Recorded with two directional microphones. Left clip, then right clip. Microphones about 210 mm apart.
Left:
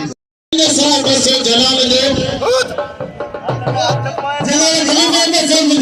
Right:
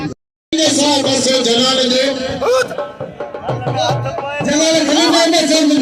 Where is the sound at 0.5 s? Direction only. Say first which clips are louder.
Left 1 dB; 10° left (ahead or behind).